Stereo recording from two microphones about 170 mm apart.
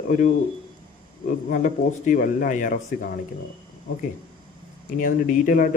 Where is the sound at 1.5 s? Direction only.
50° left (ahead or behind).